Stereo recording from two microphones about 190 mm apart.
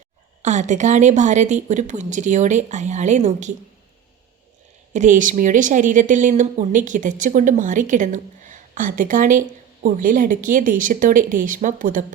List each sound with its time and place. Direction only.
0.4 s speech: 40° right (ahead or behind)
4.9 s speech: 40° right (ahead or behind)